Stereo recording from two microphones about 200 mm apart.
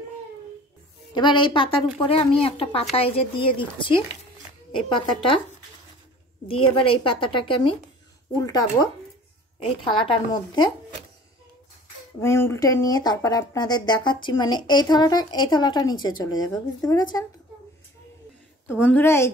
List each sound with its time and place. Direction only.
1.1 s speech: 25° left (ahead or behind)
6.4 s speech: 25° left (ahead or behind)
12.2 s speech: 10° left (ahead or behind)
18.7 s a woman's voice: 10° left (ahead or behind)